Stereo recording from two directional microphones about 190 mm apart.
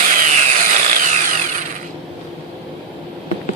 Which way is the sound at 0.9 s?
40° right (ahead or behind).